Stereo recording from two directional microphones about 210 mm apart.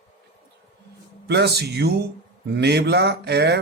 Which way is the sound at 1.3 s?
50° right (ahead or behind).